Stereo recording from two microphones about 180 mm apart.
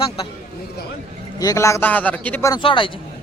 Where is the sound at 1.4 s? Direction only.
15° left (ahead or behind).